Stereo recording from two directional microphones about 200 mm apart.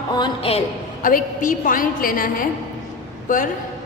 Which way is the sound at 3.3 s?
40° left (ahead or behind).